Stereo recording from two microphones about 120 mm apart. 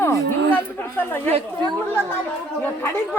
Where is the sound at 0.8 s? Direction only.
15° left (ahead or behind).